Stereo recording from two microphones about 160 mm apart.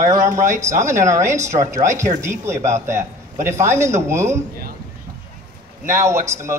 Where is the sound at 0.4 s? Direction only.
20° right (ahead or behind).